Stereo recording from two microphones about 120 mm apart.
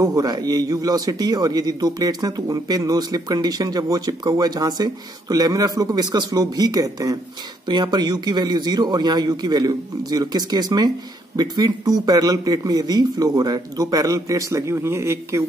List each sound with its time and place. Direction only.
0.0 s a man's voice: 30° right (ahead or behind)